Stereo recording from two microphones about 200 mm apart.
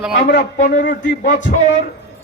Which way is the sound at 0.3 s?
50° left (ahead or behind).